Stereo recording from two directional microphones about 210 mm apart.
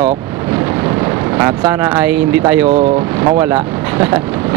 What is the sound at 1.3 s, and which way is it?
Speech, 15° right (ahead or behind).